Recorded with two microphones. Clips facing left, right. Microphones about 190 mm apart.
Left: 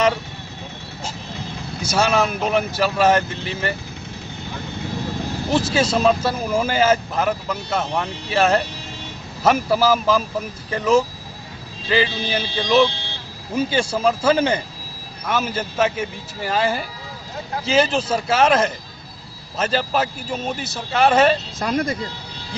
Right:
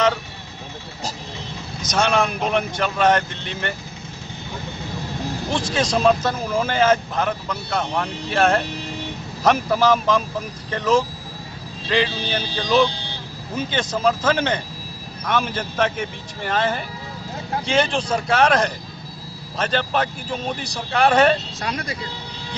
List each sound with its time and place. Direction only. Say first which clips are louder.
1.8 s speech: left 1 dB; 5° left (ahead or behind)
5.5 s speech: left 3 dB; 5° left (ahead or behind)
21.5 s speech: left 6 dB; 50° left (ahead or behind)